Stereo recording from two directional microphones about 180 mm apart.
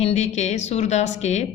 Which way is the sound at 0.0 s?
40° left (ahead or behind).